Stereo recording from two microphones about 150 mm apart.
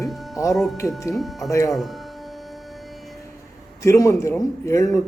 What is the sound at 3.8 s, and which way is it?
A man's voice, 20° left (ahead or behind).